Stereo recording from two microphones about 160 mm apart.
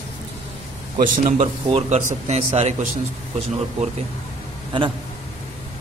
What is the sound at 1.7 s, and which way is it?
Speech, 45° right (ahead or behind).